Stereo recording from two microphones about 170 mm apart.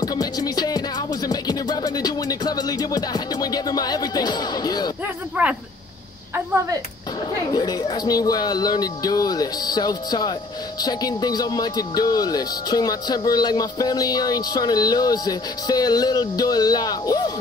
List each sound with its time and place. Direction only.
0.0 s music: 20° left (ahead or behind)
5.0 s speech: 10° right (ahead or behind)
7.5 s speech: 25° left (ahead or behind)